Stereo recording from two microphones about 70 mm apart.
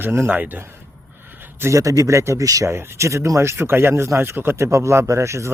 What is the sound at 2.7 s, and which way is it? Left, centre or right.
Speech, right.